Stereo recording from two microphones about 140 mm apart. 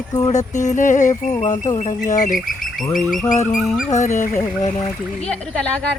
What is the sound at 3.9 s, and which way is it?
Music, 60° left (ahead or behind).